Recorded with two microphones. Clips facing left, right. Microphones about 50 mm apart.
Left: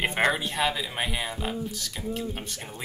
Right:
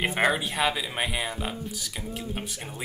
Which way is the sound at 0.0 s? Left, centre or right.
Centre.